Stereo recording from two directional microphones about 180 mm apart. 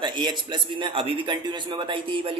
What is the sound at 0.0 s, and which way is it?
A man's voice, 25° right (ahead or behind).